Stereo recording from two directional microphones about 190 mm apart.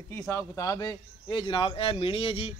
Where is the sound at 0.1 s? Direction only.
15° left (ahead or behind).